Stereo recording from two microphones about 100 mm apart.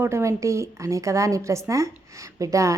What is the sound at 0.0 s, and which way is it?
A woman's voice, 30° right (ahead or behind).